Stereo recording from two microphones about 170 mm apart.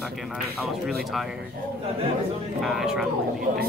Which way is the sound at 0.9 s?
Centre (ahead or behind).